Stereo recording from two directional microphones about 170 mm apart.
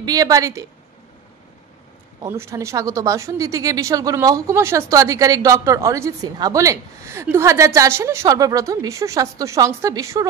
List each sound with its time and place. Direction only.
0.0 s a woman's voice: 20° right (ahead or behind)
2.2 s a woman's voice: 15° right (ahead or behind)